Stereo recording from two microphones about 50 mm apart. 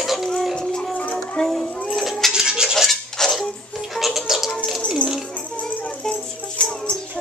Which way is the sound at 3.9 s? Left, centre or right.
Centre.